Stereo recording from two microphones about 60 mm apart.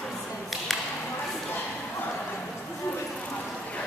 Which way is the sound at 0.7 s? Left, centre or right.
Centre.